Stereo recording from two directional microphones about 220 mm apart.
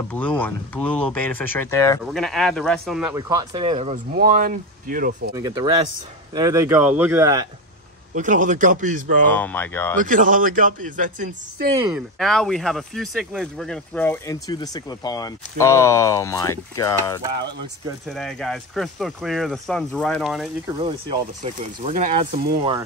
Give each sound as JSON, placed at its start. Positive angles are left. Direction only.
{"t": 0.1, "sound": "speech", "side_deg": 5}
{"t": 2.1, "sound": "speech", "side_deg": 0}
{"t": 3.3, "sound": "speech", "side_deg": -20}
{"t": 3.9, "sound": "speech", "side_deg": -40}
{"t": 5.3, "sound": "speech", "side_deg": -15}
{"t": 8.1, "sound": "speech", "side_deg": -35}
{"t": 9.2, "sound": "speech", "side_deg": 5}
{"t": 9.9, "sound": "speech", "side_deg": -35}
{"t": 11.9, "sound": "speech", "side_deg": 0}
{"t": 18.0, "sound": "speech", "side_deg": 0}
{"t": 21.4, "sound": "speech", "side_deg": -30}